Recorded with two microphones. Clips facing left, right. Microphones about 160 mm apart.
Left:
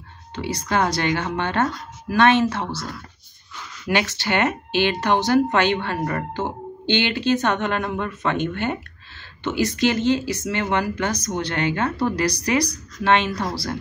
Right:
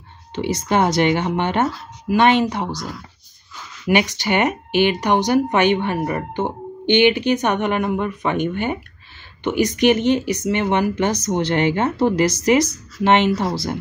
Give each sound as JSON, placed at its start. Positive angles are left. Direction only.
{"t": 0.3, "sound": "speech", "side_deg": -20}